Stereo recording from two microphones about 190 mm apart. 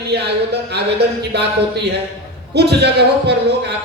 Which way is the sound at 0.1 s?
60° right (ahead or behind).